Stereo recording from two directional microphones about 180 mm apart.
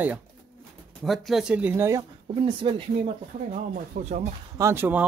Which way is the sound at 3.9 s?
60° right (ahead or behind).